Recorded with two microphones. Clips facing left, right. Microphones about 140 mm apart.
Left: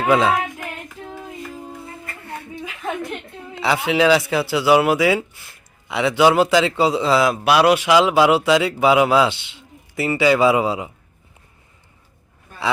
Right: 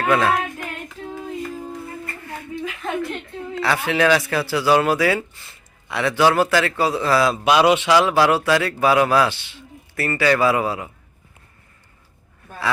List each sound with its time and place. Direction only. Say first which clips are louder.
0.0 s child singing: left 2 dB; 15° left (ahead or behind)
3.5 s a man's voice: left 2 dB; 15° left (ahead or behind)
7.3 s a man's voice: left 1 dB; 5° left (ahead or behind)
7.9 s a man's voice: left 2 dB; 15° left (ahead or behind)